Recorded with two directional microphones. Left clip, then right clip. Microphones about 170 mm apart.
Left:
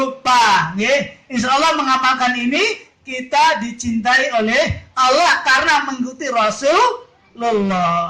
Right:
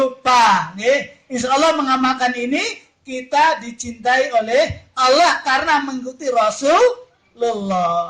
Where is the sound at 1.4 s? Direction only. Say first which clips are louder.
Left 1 dB; 45° right (ahead or behind).